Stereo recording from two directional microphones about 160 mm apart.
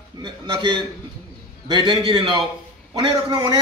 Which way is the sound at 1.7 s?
30° right (ahead or behind).